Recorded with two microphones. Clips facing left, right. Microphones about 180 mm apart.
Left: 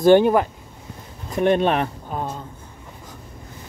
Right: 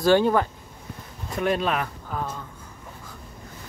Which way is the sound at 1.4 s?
30° left (ahead or behind).